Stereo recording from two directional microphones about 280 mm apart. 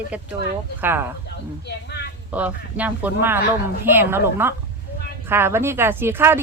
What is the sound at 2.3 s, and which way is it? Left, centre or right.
Speech, centre.